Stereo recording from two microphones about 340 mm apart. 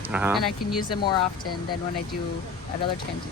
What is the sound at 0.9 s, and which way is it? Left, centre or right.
Speech, centre.